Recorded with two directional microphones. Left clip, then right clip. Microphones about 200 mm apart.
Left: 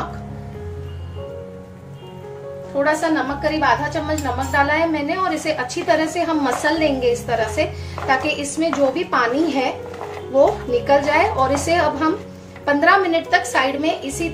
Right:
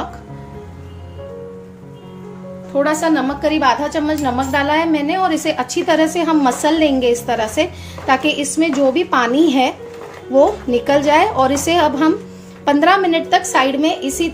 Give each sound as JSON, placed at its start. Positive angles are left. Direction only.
{"t": 2.8, "sound": "a woman's voice", "side_deg": -45}